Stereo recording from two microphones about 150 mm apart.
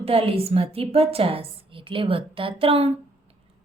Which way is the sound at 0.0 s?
40° right (ahead or behind).